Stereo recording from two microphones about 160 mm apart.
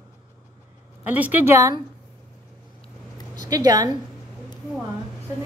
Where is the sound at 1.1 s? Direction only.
10° right (ahead or behind).